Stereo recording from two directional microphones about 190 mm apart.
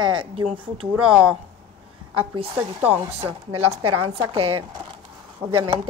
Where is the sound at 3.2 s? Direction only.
30° right (ahead or behind).